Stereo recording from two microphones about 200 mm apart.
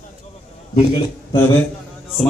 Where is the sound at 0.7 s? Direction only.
25° left (ahead or behind).